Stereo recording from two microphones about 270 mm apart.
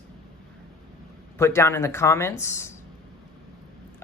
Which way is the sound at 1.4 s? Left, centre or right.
Centre.